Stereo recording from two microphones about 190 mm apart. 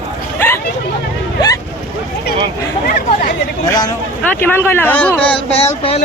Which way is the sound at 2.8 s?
50° left (ahead or behind).